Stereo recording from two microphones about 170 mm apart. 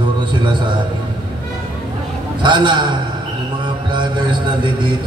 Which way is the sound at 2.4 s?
25° right (ahead or behind).